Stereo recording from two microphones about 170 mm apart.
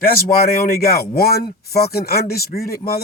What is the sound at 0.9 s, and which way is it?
Speech, 65° left (ahead or behind).